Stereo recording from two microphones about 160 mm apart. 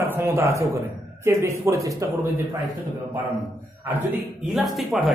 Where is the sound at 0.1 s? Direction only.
15° right (ahead or behind).